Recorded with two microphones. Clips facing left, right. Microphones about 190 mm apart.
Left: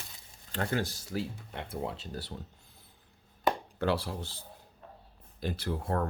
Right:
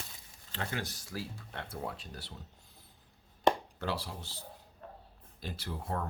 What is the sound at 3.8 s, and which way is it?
Speech, 55° left (ahead or behind).